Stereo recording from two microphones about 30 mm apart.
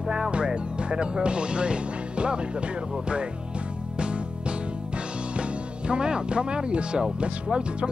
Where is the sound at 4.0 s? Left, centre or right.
Right.